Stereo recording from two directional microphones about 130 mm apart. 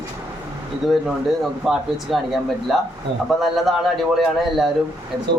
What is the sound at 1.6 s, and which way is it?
A man's voice, centre (ahead or behind).